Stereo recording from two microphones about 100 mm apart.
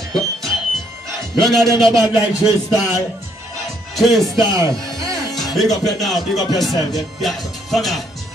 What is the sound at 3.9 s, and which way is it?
Speech, centre (ahead or behind).